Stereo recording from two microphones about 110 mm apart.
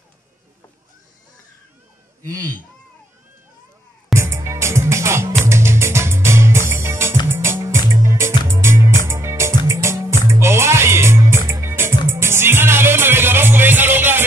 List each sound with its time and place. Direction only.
2.2 s speech: 35° right (ahead or behind)
4.1 s music: 25° right (ahead or behind)